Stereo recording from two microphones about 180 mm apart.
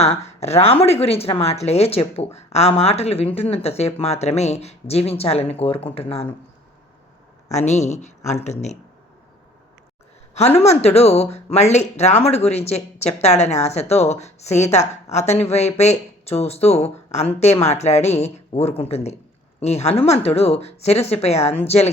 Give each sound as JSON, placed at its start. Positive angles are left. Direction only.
{"t": 0.3, "sound": "speech", "side_deg": 35}
{"t": 7.5, "sound": "speech", "side_deg": 40}
{"t": 10.3, "sound": "speech", "side_deg": 35}